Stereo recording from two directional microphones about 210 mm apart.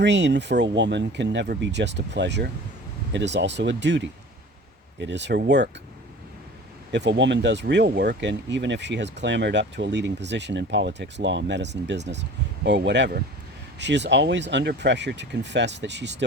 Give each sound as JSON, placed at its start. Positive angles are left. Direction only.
{"t": 0.0, "sound": "speech", "side_deg": -55}
{"t": 6.9, "sound": "speech", "side_deg": -55}